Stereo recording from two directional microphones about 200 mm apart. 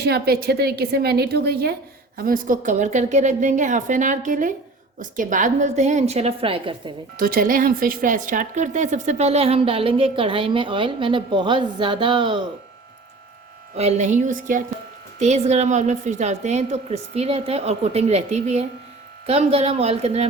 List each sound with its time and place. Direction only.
0.0 s a woman's voice: 50° right (ahead or behind); by 6.9 s 25° right (ahead or behind)
7.2 s speech: 45° right (ahead or behind); by 12.5 s 25° right (ahead or behind)
13.7 s a woman's voice: 35° right (ahead or behind)